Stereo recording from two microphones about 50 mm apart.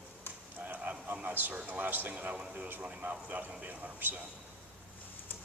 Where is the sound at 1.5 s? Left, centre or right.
Right.